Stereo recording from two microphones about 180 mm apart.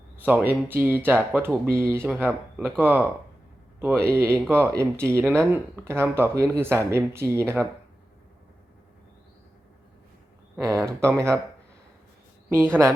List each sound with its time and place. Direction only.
0.2 s speech: 10° right (ahead or behind)
10.6 s speech: 15° right (ahead or behind)
12.5 s speech: 15° right (ahead or behind)